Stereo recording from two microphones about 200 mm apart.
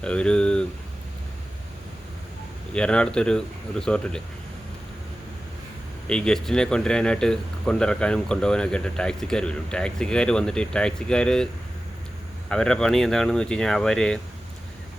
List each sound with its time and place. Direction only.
0.0 s speech: 5° left (ahead or behind)
2.7 s speech: 5° left (ahead or behind)
6.1 s speech: 5° left (ahead or behind)
12.5 s speech: 5° left (ahead or behind)